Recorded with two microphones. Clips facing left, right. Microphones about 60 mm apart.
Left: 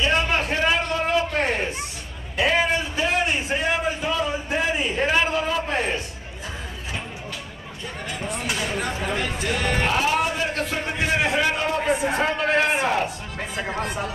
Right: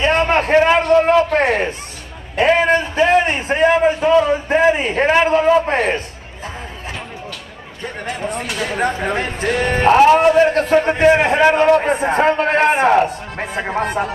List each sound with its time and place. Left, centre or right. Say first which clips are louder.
0.0 s a sound: right 7 dB; right
2.3 s a man's voice: right 7 dB; right
8.5 s a man's voice: right 7 dB; right